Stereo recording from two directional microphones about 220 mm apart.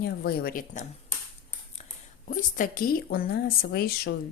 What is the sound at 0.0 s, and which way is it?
Speech, 45° left (ahead or behind).